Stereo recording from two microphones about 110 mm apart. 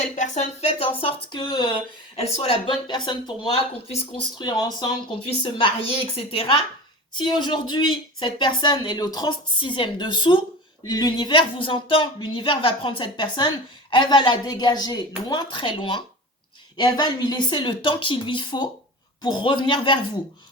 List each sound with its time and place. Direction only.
0.0 s speech: 90° left; by 1.7 s 45° left (ahead or behind)
2.1 s speech: 70° left (ahead or behind)
2.8 s a woman's voice: 45° left (ahead or behind)
5.2 s a woman's voice: 50° left (ahead or behind)
7.1 s a woman's voice: 45° left (ahead or behind)
10.8 s speech: 35° left (ahead or behind)
11.3 s a woman's voice: 50° left (ahead or behind)